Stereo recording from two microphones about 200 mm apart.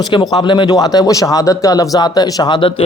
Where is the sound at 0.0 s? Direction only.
20° left (ahead or behind).